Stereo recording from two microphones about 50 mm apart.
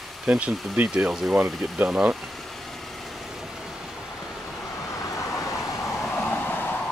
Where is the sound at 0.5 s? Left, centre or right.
Centre.